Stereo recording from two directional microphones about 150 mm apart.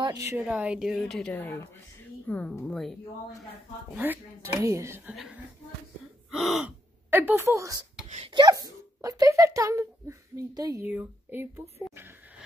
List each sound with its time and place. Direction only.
0.0 s speech: 20° right (ahead or behind); by 1.3 s centre (ahead or behind)
1.3 s a woman's voice: 15° left (ahead or behind)
2.6 s gasp: centre (ahead or behind)
3.9 s speech: 10° right (ahead or behind)
5.1 s gasp: 5° right (ahead or behind)
7.1 s speech: 15° right (ahead or behind)
10.8 s speech: 10° right (ahead or behind)